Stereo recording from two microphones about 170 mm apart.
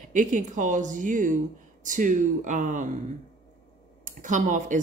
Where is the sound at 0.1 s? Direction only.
45° right (ahead or behind).